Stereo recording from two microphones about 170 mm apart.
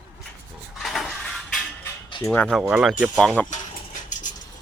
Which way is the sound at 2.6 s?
5° right (ahead or behind).